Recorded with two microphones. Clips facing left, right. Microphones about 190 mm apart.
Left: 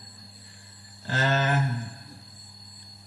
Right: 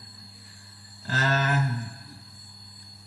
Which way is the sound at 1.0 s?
25° left (ahead or behind).